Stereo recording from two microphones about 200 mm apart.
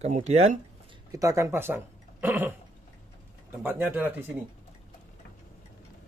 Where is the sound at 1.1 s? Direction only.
15° right (ahead or behind).